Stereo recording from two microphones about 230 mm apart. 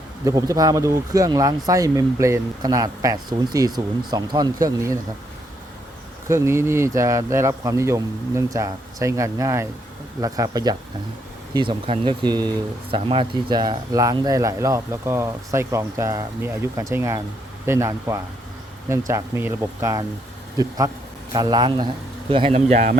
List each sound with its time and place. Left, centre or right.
0.3 s speech: centre
6.2 s speech: centre; by 23.0 s right